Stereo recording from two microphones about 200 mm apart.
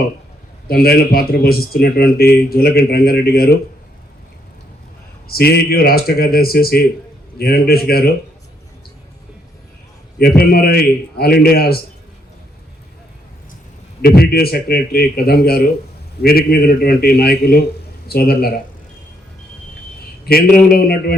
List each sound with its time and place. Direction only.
0.7 s a man's voice: 50° left (ahead or behind)
5.3 s a man's voice: 50° left (ahead or behind)
10.2 s a man's voice: 50° left (ahead or behind)
14.0 s a man's voice: 50° left (ahead or behind)
20.2 s a man's voice: 50° left (ahead or behind)